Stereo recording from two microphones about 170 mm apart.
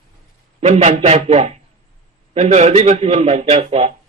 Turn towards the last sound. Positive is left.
turn(degrees=-40)  # may be behind; listen again after turning